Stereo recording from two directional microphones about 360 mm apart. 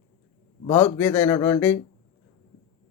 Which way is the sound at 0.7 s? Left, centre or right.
Centre.